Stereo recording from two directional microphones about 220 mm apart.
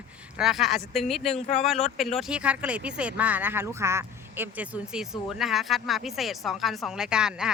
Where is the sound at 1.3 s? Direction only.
30° left (ahead or behind).